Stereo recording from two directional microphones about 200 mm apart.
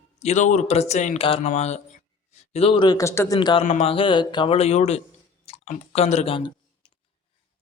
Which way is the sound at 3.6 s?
35° left (ahead or behind).